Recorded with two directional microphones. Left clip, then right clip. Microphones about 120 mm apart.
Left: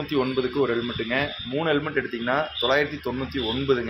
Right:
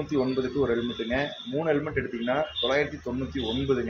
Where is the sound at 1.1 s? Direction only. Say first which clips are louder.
Left 3 dB; 15° left (ahead or behind).